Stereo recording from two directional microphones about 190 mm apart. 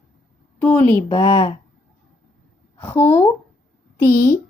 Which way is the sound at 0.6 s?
5° left (ahead or behind).